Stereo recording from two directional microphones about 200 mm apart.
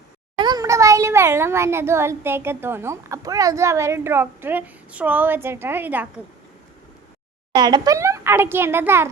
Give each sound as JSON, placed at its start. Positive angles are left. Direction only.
{"t": 0.3, "sound": "a child's voice", "side_deg": -20}
{"t": 7.5, "sound": "a child's voice", "side_deg": -20}